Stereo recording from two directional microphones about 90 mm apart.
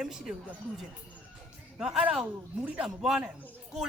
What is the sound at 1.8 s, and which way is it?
A man's voice, 10° right (ahead or behind).